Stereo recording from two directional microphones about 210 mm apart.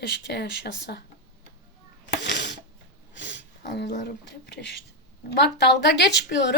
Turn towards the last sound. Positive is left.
turn(degrees=55)  # may be behind; listen again after turning